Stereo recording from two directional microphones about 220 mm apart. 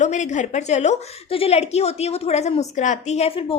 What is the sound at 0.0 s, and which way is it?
A woman's voice, 35° left (ahead or behind).